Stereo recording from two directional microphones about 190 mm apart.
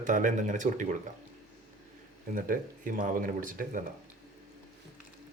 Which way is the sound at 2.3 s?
45° right (ahead or behind).